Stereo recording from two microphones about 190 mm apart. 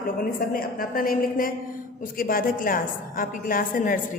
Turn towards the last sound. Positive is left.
turn(degrees=45)  # may be behind; listen again after turning